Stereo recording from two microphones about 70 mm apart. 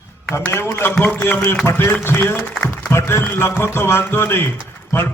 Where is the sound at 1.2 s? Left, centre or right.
Left.